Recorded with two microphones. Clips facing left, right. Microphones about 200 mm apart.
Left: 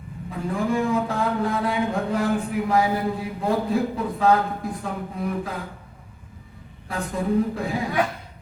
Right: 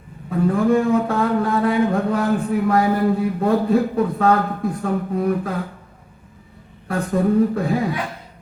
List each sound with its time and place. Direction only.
0.3 s a man's voice: 55° right (ahead or behind)
6.8 s a man's voice: 55° right (ahead or behind)